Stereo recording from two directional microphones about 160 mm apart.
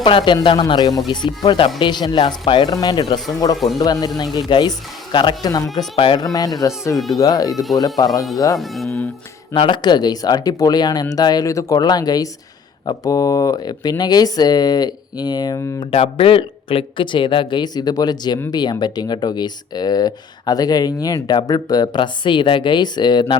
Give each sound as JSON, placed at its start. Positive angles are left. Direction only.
{"t": 0.0, "sound": "speech", "side_deg": 30}
{"t": 8.5, "sound": "speech", "side_deg": 0}
{"t": 9.5, "sound": "speech", "side_deg": 30}
{"t": 15.9, "sound": "speech", "side_deg": 35}